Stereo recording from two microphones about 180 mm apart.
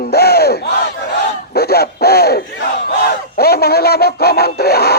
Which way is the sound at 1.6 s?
60° left (ahead or behind).